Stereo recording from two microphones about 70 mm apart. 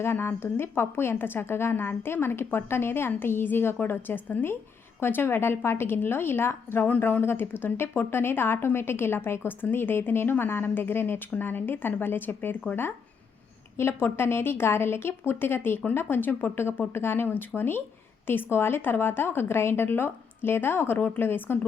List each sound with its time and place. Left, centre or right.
0.0 s a woman's voice: left
13.7 s a woman's voice: left